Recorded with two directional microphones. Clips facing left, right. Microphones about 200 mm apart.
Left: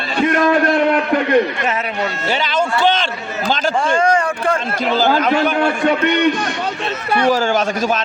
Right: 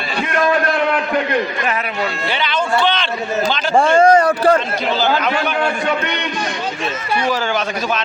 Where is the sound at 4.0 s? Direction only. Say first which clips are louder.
Right 5 dB; 40° right (ahead or behind).